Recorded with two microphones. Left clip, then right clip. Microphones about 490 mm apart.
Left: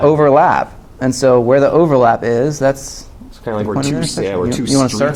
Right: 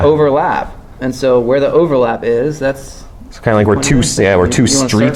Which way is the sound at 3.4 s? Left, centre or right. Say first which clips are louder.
Right 7 dB; right.